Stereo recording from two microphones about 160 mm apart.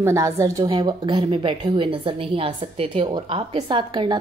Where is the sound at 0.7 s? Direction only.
30° right (ahead or behind).